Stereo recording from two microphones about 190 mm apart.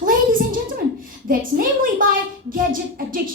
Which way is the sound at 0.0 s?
45° right (ahead or behind).